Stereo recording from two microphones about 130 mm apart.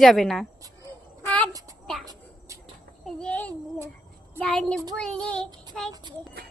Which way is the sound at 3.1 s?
5° left (ahead or behind).